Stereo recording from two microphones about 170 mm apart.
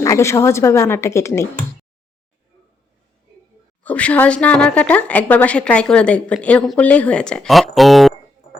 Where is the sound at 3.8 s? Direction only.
10° left (ahead or behind).